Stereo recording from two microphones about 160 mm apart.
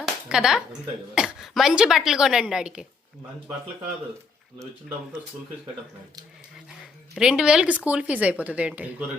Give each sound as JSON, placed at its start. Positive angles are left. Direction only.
{"t": 0.0, "sound": "a sound", "side_deg": -5}
{"t": 1.1, "sound": "a woman's voice", "side_deg": -5}
{"t": 7.2, "sound": "speech", "side_deg": -5}